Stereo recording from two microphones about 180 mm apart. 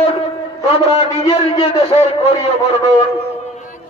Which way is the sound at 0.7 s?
35° left (ahead or behind).